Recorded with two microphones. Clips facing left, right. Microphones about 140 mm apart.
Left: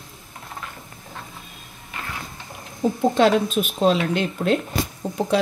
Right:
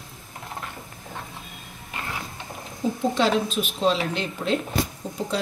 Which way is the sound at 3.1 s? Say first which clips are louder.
Left 5 dB; 50° left (ahead or behind).